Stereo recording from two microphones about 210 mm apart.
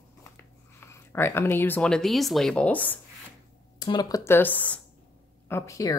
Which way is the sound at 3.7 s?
20° left (ahead or behind).